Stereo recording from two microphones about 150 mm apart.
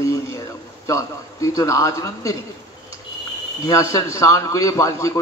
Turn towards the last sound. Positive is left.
turn(degrees=20)  # may be behind; listen again after turning